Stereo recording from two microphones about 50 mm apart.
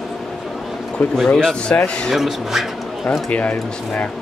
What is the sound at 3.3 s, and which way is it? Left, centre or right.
Speech, left.